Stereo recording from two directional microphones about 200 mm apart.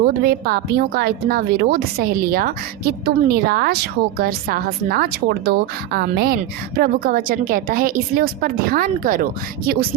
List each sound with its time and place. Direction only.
0.2 s a woman's voice: 50° right (ahead or behind)